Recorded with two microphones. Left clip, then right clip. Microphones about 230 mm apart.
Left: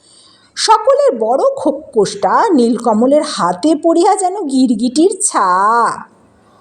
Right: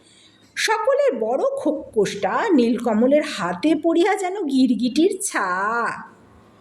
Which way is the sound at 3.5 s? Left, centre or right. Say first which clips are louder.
Left 7 dB; centre.